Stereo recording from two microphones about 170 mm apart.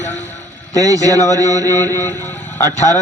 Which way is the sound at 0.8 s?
20° right (ahead or behind).